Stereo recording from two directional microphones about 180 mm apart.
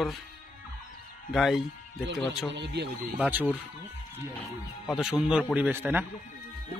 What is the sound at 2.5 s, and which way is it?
Speech, 70° right (ahead or behind).